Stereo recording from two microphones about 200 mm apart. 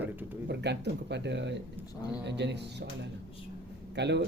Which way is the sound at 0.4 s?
60° right (ahead or behind).